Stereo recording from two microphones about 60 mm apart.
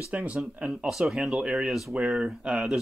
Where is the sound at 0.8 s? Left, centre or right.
Centre.